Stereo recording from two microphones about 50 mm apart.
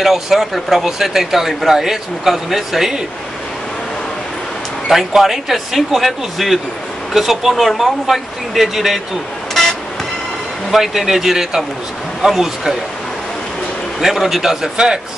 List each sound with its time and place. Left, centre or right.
0.0 s speech: centre
4.8 s speech: centre
10.7 s speech: centre
13.9 s speech: centre